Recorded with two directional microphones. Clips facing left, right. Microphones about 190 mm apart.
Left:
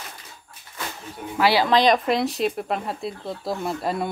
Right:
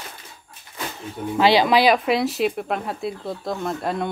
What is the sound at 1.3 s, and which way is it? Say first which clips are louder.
Speech: right 3 dB; 20° right (ahead or behind).